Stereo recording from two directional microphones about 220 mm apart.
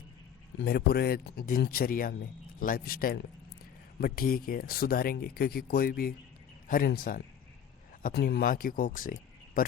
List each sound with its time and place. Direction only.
0.6 s speech: 45° left (ahead or behind)